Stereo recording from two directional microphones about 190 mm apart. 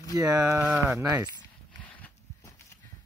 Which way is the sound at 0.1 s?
20° right (ahead or behind).